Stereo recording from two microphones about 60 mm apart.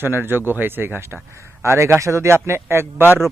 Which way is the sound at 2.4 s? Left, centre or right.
Right.